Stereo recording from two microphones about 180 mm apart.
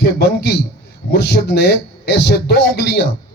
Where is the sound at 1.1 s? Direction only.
65° left (ahead or behind).